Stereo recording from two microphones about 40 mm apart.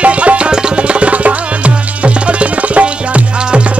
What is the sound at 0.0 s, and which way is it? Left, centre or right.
Music, right.